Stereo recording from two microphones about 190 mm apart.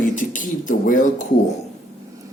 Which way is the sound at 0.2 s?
45° left (ahead or behind).